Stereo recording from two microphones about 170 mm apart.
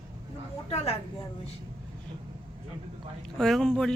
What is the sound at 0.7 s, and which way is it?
Speech, 35° left (ahead or behind).